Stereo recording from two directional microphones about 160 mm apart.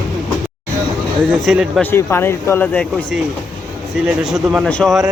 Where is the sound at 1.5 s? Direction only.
Centre (ahead or behind).